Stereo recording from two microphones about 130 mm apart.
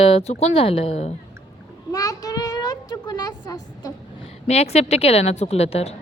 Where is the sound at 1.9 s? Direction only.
30° left (ahead or behind).